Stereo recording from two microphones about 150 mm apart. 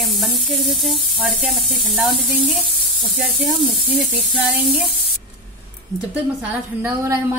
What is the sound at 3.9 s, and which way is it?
Speech, 10° right (ahead or behind).